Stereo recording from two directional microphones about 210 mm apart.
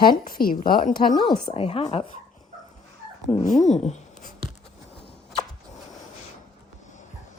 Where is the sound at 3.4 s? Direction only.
35° left (ahead or behind).